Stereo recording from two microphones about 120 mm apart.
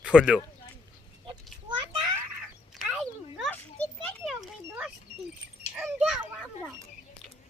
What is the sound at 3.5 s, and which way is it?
Children playing, 10° left (ahead or behind).